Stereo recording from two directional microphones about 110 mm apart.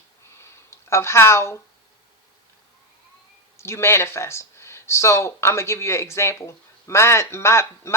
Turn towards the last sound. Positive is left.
turn(degrees=25)  # may be behind; listen again after turning